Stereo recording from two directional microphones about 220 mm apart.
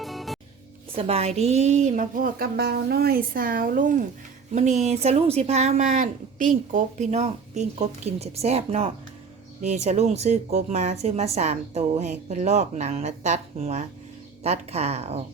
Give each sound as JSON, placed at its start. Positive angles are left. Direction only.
{"t": 0.0, "sound": "music", "side_deg": 0}
{"t": 0.9, "sound": "speech", "side_deg": -25}